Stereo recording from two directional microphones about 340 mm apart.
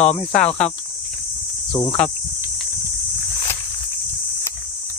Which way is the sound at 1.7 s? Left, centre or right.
Centre.